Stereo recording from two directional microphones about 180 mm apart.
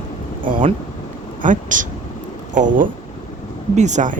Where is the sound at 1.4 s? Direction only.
45° right (ahead or behind).